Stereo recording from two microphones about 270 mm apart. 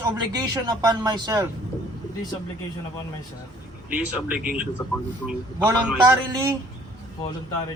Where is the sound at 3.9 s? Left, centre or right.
Centre.